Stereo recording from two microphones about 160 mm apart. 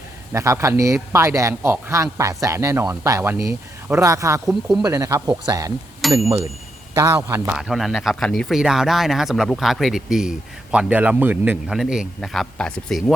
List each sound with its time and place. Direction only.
0.3 s a man's voice: 20° right (ahead or behind)
6.0 s bicycle bell: centre (ahead or behind)
6.9 s a man's voice: 20° right (ahead or behind)
7.5 s speech: 5° right (ahead or behind)